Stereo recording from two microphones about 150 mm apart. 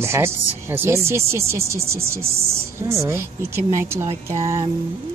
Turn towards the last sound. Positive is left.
turn(degrees=-20)  # may be behind; listen again after turning